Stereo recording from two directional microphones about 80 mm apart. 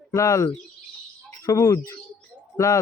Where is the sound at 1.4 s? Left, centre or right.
Left.